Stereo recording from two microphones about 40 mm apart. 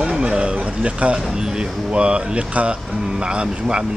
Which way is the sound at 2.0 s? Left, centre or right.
Right.